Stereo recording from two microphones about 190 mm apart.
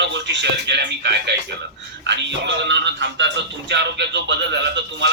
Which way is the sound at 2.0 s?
65° right (ahead or behind).